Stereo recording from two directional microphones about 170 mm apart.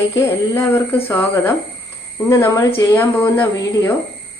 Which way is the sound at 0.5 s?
15° left (ahead or behind).